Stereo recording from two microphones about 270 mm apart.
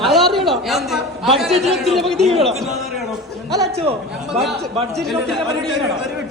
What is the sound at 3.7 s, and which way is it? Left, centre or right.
Speech, right.